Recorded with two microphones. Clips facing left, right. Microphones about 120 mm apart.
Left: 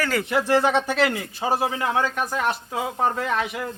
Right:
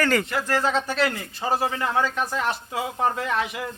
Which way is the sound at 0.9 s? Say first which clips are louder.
Left 2 dB; 5° left (ahead or behind).